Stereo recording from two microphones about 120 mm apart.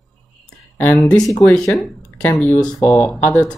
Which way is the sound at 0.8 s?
15° left (ahead or behind).